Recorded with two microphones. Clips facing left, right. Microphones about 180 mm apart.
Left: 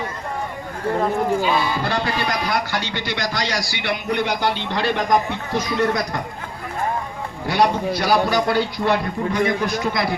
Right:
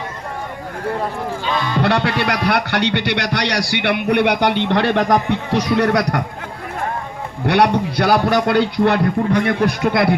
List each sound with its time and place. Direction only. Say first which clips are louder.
1.4 s music: left 1 dB; 10° left (ahead or behind)
1.8 s a man's voice: right 5 dB; 70° right (ahead or behind)
7.4 s a man's voice: right 4 dB; 65° right (ahead or behind)